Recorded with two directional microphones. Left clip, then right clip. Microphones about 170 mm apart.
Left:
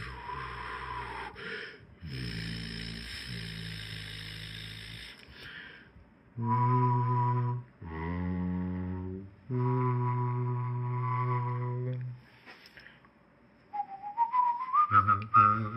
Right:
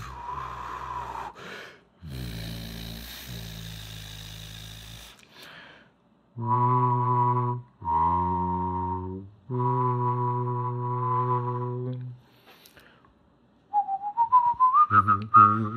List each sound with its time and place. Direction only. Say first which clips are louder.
0.0 s a sound: right 4 dB; 40° right (ahead or behind)
6.4 s mantra: right 6 dB; 45° right (ahead or behind); by 12.0 s 30° right (ahead or behind)
13.7 s whistling: right 8 dB; 45° right (ahead or behind)